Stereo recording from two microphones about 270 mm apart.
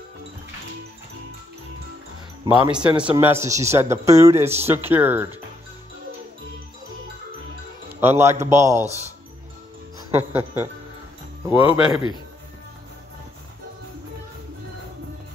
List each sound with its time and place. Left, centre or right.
2.4 s speech: centre
8.0 s speech: centre
8.8 s speech: right
9.9 s speech: centre